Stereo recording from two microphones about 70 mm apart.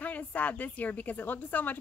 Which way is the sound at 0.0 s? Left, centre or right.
Left.